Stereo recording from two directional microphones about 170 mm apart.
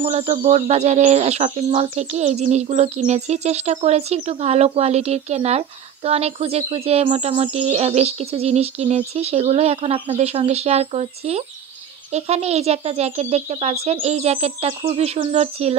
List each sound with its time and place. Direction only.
0.0 s speech: 40° right (ahead or behind)